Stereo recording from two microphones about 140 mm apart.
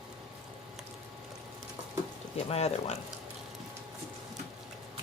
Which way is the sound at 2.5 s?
50° left (ahead or behind).